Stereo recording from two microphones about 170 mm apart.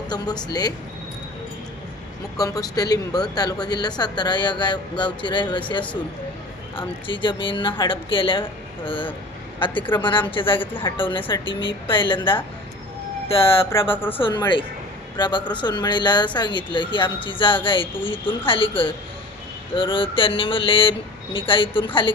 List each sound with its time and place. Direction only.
0.1 s speech: 25° left (ahead or behind)
2.4 s speech: 20° left (ahead or behind)
13.9 s speech: 10° left (ahead or behind)
14.2 s speech: 30° left (ahead or behind)